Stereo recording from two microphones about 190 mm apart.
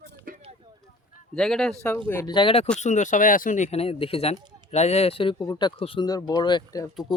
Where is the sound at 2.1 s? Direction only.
20° left (ahead or behind).